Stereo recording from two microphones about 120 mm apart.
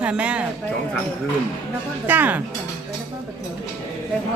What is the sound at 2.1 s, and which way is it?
Speech, 15° right (ahead or behind).